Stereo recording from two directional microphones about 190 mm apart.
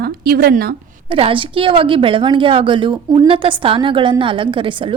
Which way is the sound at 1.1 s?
30° right (ahead or behind).